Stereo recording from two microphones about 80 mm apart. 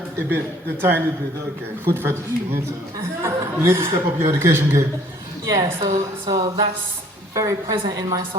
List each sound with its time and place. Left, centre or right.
0.3 s a man's voice: right
5.8 s a sound: right
7.3 s a woman's voice: right